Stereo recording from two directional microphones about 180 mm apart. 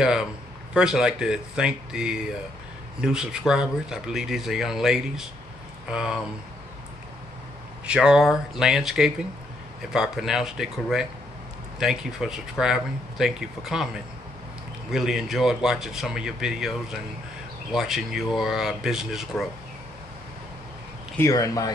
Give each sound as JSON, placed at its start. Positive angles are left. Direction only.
{"t": 0.0, "sound": "speech", "side_deg": -5}
{"t": 7.8, "sound": "speech", "side_deg": -5}
{"t": 14.9, "sound": "speech", "side_deg": 0}
{"t": 21.2, "sound": "speech", "side_deg": 20}